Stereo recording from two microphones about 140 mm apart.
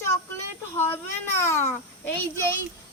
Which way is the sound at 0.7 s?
15° left (ahead or behind).